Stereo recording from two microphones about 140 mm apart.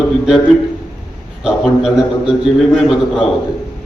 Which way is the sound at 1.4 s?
5° right (ahead or behind).